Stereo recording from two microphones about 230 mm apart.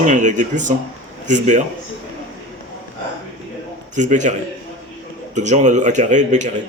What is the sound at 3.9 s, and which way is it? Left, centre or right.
Speech, right.